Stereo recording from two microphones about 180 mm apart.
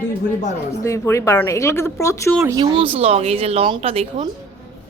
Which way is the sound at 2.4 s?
15° right (ahead or behind).